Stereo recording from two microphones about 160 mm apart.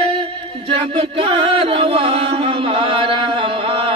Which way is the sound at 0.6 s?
35° right (ahead or behind).